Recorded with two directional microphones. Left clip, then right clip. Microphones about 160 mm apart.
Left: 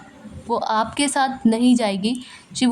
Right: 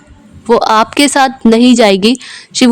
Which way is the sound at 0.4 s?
45° right (ahead or behind).